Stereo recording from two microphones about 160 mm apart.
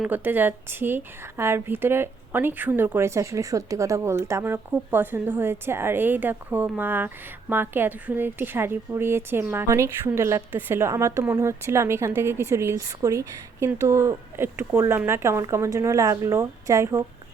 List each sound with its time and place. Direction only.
0.0 s a woman's voice: 10° right (ahead or behind)